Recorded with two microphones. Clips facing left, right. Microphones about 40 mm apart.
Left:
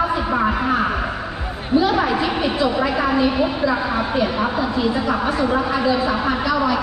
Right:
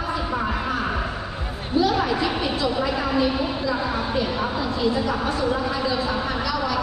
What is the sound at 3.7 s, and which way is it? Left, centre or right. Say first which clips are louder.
A woman's voice: left 4 dB; left.